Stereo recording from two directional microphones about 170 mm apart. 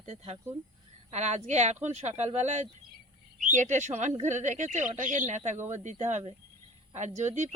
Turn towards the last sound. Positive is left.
turn(degrees=-45)  # may be behind; listen again after turning